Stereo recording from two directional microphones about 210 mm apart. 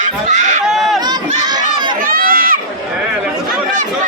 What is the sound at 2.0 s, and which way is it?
Run, 45° right (ahead or behind).